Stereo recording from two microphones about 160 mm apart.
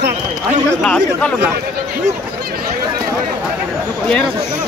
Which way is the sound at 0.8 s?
5° left (ahead or behind).